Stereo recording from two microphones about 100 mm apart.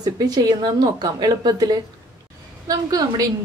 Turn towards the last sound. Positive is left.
turn(degrees=-40)  # may be behind; listen again after turning